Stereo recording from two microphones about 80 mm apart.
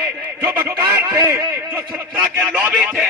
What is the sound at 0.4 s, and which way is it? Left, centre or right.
Radio, right.